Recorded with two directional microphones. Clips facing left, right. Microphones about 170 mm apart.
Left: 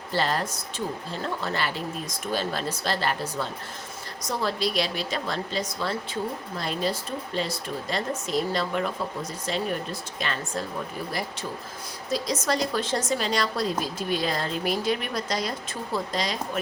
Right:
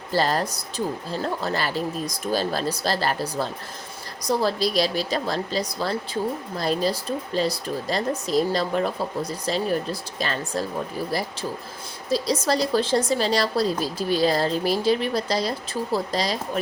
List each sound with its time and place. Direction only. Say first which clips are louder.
0.1 s a woman's voice: right 4 dB; 40° right (ahead or behind)
12.1 s a woman's voice: right 4 dB; 30° right (ahead or behind)